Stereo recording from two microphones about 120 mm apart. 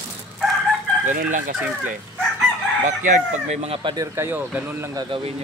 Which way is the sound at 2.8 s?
90° right.